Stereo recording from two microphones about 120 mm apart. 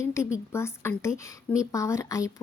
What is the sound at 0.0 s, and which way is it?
Speech, 25° left (ahead or behind).